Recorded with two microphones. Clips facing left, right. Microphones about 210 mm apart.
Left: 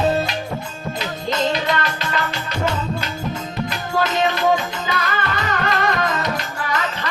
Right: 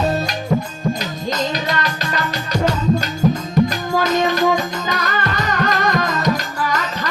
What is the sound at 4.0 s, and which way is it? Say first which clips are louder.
Music: right 2 dB; 40° right (ahead or behind).